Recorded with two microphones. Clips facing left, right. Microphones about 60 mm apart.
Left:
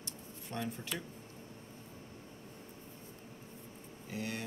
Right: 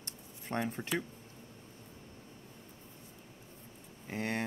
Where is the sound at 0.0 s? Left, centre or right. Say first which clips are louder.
Left 1 dB; right.